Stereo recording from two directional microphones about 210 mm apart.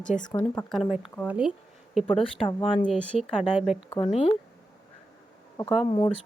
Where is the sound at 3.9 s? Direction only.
25° left (ahead or behind).